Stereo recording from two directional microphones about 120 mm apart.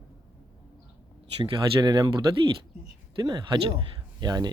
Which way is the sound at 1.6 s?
35° right (ahead or behind).